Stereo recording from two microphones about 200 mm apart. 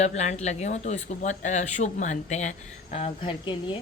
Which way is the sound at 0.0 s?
35° left (ahead or behind).